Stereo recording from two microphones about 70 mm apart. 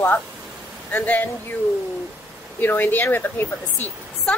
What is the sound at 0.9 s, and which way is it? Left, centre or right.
Speech, left.